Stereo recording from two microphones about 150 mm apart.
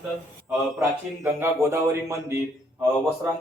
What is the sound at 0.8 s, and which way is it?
A man's voice, 15° right (ahead or behind).